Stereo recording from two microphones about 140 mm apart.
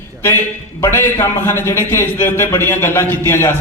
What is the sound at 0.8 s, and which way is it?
A man's voice, 20° left (ahead or behind).